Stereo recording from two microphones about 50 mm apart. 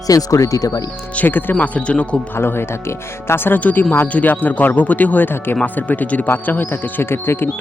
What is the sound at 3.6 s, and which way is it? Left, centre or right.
Speech, left.